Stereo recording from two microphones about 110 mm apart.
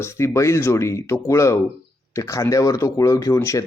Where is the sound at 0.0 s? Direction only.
25° left (ahead or behind).